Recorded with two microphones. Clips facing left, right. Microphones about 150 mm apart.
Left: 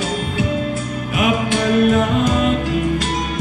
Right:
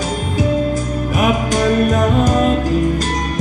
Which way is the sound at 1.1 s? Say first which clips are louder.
Right 1 dB; 40° right (ahead or behind).